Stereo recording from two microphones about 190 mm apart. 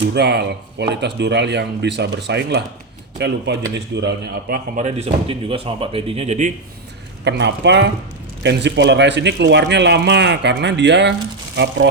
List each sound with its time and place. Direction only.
0.1 s speech: 60° right (ahead or behind)
4.8 s speech: 35° right (ahead or behind)
7.3 s speech: 65° right (ahead or behind)